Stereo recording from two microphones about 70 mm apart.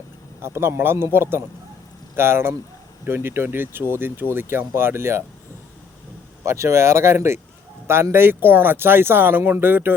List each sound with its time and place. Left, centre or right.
0.4 s speech: right
6.4 s speech: right